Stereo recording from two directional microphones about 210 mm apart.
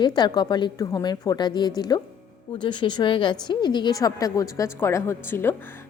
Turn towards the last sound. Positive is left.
turn(degrees=10)  # may be behind; listen again after turning